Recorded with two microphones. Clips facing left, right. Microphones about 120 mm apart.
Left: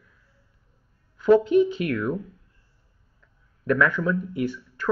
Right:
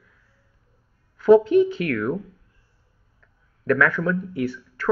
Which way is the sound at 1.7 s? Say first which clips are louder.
Right 1 dB; 50° right (ahead or behind).